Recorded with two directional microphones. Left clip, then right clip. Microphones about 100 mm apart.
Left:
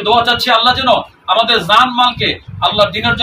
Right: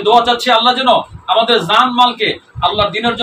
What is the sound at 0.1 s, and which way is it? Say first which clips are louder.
A man's voice: right 1 dB; 25° right (ahead or behind).